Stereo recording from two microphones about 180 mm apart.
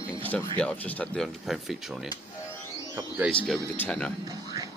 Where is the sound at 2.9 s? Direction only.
15° right (ahead or behind).